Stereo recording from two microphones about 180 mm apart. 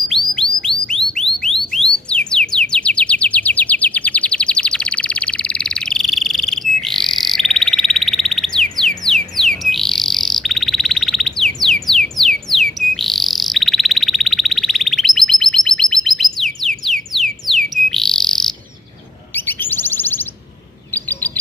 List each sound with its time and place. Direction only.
0.7 s a sound: 30° left (ahead or behind)
1.1 s alarm: 5° left (ahead or behind)
8.7 s bird: 5° left (ahead or behind)
16.6 s a sound: centre (ahead or behind)
17.8 s bird: centre (ahead or behind)
19.3 s chirp: 10° left (ahead or behind)